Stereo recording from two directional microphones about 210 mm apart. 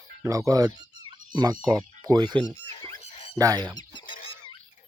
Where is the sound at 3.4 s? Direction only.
20° right (ahead or behind).